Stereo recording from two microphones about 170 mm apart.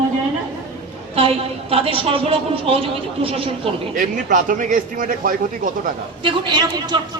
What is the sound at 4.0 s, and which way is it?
A man's voice, 50° right (ahead or behind).